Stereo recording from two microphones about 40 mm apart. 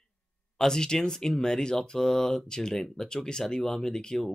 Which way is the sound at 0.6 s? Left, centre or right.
Centre.